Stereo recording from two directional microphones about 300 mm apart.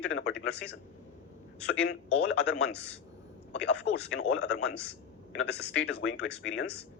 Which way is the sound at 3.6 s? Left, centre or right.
Left.